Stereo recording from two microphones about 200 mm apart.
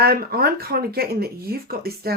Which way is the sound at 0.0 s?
50° right (ahead or behind).